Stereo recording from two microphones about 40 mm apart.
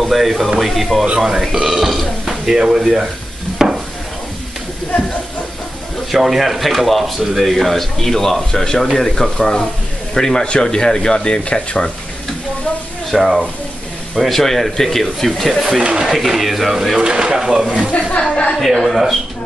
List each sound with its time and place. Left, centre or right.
0.0 s speech: centre
3.5 s a sound: centre
6.1 s speech: centre; by 11.9 s left
13.1 s speech: centre
15.8 s speech: right
16.1 s speech: centre
17.0 s speech: right
18.6 s speech: centre